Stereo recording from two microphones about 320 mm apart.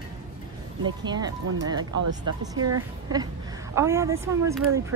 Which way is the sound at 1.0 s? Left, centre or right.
Centre.